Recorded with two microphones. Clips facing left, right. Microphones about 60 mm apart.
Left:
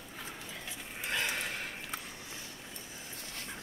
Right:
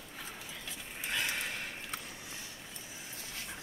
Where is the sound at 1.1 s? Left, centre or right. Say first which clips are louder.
Left 1 dB; centre.